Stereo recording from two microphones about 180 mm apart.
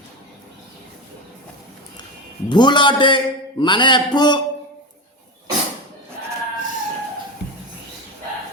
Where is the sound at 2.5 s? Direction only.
25° left (ahead or behind).